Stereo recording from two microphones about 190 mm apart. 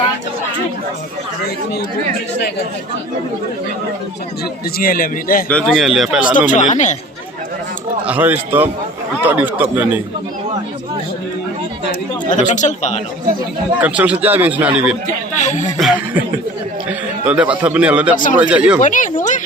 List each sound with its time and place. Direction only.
4.8 s a man's voice: 50° left (ahead or behind)
5.5 s speech: 5° left (ahead or behind)
6.5 s speech: 40° left (ahead or behind)
8.0 s a man's voice: 10° right (ahead or behind)
12.4 s speech: 40° left (ahead or behind)
13.8 s a man's voice: 5° right (ahead or behind)
15.4 s speech: 40° left (ahead or behind)
15.8 s speech: 5° right (ahead or behind)
17.2 s a man's voice: 5° right (ahead or behind)
18.8 s a sound: 40° left (ahead or behind)